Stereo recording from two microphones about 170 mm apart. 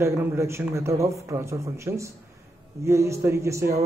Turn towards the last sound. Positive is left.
turn(degrees=-15)  # may be behind; listen again after turning